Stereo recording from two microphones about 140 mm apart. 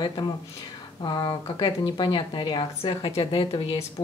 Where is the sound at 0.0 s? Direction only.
35° left (ahead or behind).